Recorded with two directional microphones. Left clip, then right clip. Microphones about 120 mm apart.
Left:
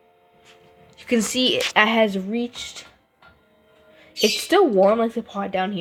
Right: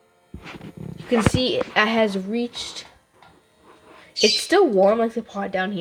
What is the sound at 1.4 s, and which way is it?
Speech, 5° right (ahead or behind).